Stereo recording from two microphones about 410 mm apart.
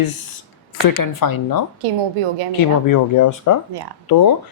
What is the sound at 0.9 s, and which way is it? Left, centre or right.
Speech, left.